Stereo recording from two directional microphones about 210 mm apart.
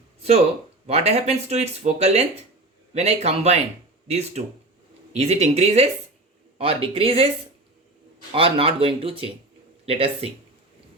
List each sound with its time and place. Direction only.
0.2 s a sound: 30° right (ahead or behind)
0.9 s speech: 30° right (ahead or behind)
5.1 s speech: 30° right (ahead or behind)
8.3 s speech: 25° right (ahead or behind)